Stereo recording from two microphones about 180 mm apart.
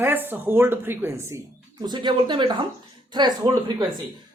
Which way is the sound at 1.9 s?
25° right (ahead or behind).